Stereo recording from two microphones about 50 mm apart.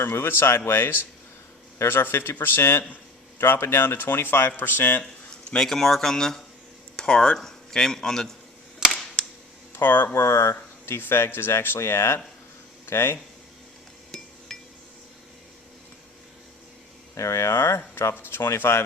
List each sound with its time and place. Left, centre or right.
0.0 s speech: left
2.9 s a sound: left
3.5 s speech: left
5.5 s speech: centre
8.8 s a sound: centre
9.2 s cap gun: centre
9.7 s speech: left
10.2 s speech: left
11.0 s speech: left
14.1 s hammer: centre
17.2 s speech: left
17.5 s speech: left